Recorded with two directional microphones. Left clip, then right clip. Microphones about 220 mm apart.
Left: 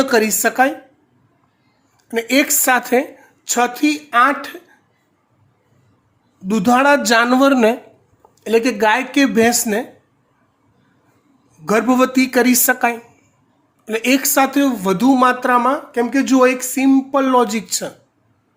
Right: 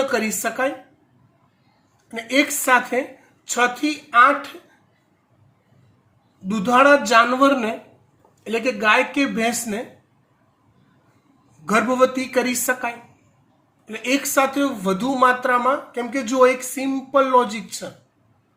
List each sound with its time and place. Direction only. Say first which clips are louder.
0.1 s speech: left 7 dB; 50° left (ahead or behind)
2.0 s speech: left 4 dB; 50° left (ahead or behind)
6.5 s speech: left 1 dB; 50° left (ahead or behind)
11.6 s speech: left 2 dB; 50° left (ahead or behind)